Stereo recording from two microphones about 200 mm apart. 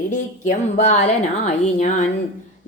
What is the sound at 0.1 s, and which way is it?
Speech, 35° left (ahead or behind).